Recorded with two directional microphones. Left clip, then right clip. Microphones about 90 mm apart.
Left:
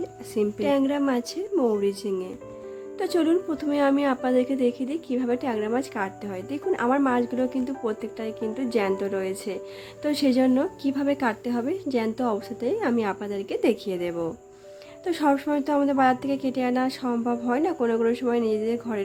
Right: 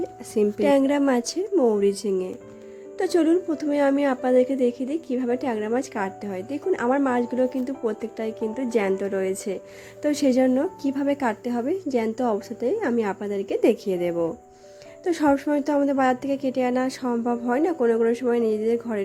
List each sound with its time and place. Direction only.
0.3 s a woman's voice: 55° right (ahead or behind)
1.5 s a woman's voice: 25° right (ahead or behind)
1.8 s speech: 45° right (ahead or behind)
3.0 s a woman's voice: 25° right (ahead or behind)
10.4 s a woman's voice: 15° right (ahead or behind)
10.8 s a woman's voice: 25° right (ahead or behind)